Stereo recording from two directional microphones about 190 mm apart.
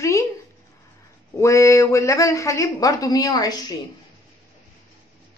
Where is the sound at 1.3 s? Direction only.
15° left (ahead or behind).